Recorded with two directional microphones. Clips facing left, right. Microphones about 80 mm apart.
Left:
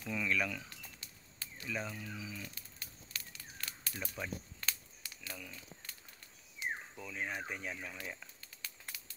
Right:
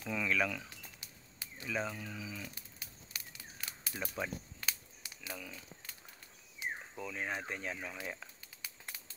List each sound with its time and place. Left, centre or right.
0.0 s livestock: centre
1.0 s a sound: centre
1.7 s livestock: centre
2.8 s a sound: centre
5.3 s speech: centre
6.6 s insect: centre
7.0 s livestock: centre
7.4 s speech: centre